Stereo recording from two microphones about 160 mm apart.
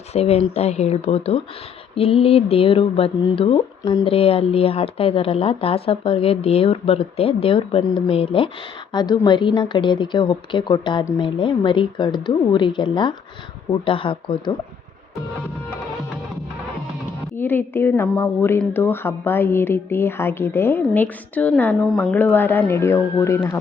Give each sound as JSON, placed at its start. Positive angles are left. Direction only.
{"t": 0.1, "sound": "a woman's voice", "side_deg": 40}
{"t": 17.3, "sound": "a woman's voice", "side_deg": 15}